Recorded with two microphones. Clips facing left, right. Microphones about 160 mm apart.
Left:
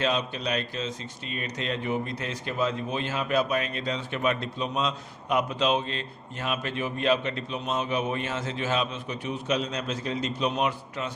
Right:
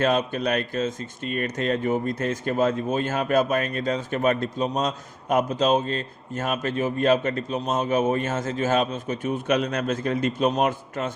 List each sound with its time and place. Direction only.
0.0 s speech: 50° right (ahead or behind)